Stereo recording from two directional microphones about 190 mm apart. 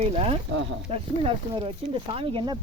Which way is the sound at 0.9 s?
30° right (ahead or behind).